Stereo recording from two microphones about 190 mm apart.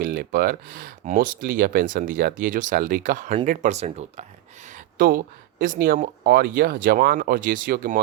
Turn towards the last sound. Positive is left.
turn(degrees=-50)  # may be behind; listen again after turning